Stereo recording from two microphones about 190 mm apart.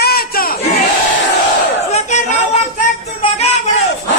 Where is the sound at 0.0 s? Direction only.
55° left (ahead or behind).